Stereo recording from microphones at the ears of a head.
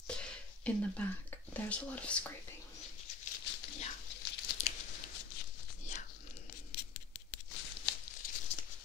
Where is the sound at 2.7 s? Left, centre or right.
Left.